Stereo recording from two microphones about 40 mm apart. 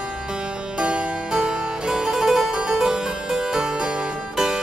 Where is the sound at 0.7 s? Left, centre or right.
Right.